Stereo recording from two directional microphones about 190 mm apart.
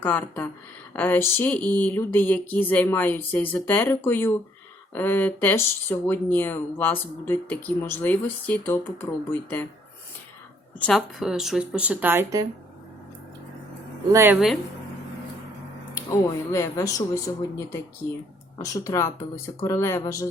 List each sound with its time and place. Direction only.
0.0 s speech: 10° left (ahead or behind)
10.8 s speech: 5° left (ahead or behind); by 12.5 s 15° right (ahead or behind)
14.1 s speech: 15° right (ahead or behind)
14.3 s speech: centre (ahead or behind)
16.0 s speech: 15° left (ahead or behind)